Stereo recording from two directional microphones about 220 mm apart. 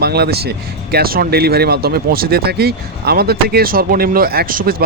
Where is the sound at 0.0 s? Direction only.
45° right (ahead or behind).